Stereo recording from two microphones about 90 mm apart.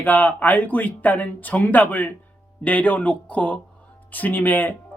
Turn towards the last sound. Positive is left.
turn(degrees=20)  # may be behind; listen again after turning